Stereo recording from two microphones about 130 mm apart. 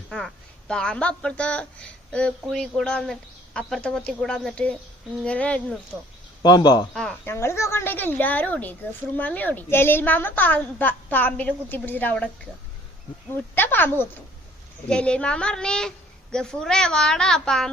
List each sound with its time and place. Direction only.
0.7 s a woman's voice: 5° left (ahead or behind)
6.4 s speech: 35° left (ahead or behind)
7.3 s a woman's voice: 20° left (ahead or behind)
13.3 s a woman's voice: 15° left (ahead or behind)